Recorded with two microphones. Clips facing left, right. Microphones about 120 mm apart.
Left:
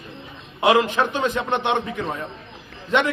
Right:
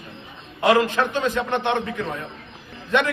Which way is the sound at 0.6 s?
20° left (ahead or behind).